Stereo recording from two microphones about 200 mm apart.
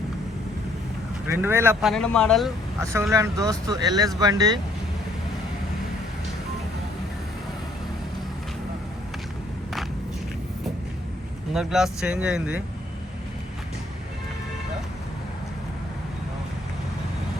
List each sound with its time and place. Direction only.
1.4 s speech: 10° right (ahead or behind)
1.8 s speech: centre (ahead or behind)
3.1 s speech: 15° right (ahead or behind)
11.5 s speech: centre (ahead or behind)